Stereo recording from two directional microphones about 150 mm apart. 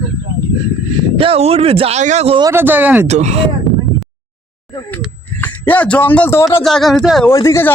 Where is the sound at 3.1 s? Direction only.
50° right (ahead or behind).